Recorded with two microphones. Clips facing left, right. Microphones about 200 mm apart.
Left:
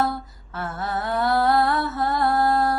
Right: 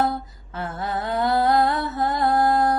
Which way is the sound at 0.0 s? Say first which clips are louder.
Right 1 dB; 20° right (ahead or behind).